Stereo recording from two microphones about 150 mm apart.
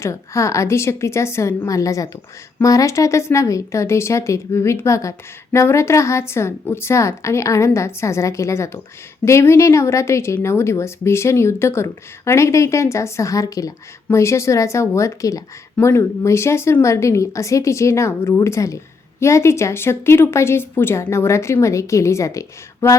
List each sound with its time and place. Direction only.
0.0 s speech: 20° left (ahead or behind)